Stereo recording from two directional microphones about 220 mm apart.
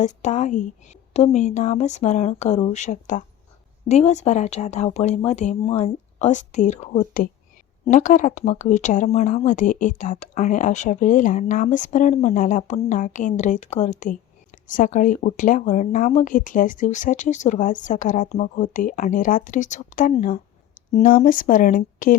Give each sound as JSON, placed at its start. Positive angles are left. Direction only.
{"t": 0.0, "sound": "speech", "side_deg": 35}